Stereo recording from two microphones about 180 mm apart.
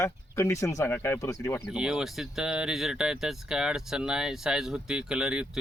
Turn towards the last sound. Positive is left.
turn(degrees=-5)  # may be behind; listen again after turning